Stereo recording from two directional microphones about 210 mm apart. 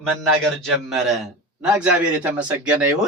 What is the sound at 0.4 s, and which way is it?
Speech, 5° left (ahead or behind).